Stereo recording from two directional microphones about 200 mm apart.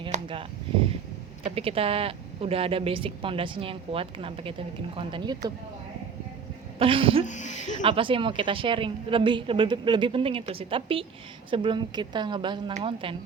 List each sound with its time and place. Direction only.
0.1 s a sound: 25° right (ahead or behind)
1.5 s speech: 30° right (ahead or behind)
6.7 s speech: 25° right (ahead or behind)
7.3 s speech: 35° left (ahead or behind)
7.7 s speech: 30° right (ahead or behind)